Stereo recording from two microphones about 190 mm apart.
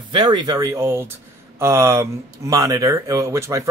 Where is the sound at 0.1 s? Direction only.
25° right (ahead or behind).